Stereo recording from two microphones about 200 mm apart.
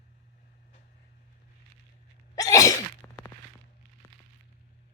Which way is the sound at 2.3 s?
15° left (ahead or behind).